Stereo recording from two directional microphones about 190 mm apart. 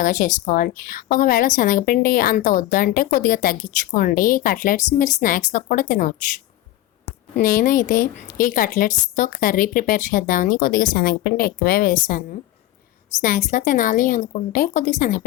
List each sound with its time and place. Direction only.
0.0 s a woman's voice: 40° left (ahead or behind)
7.4 s a woman's voice: 45° left (ahead or behind)